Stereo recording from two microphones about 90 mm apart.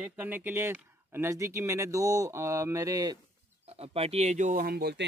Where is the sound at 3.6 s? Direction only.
90° right.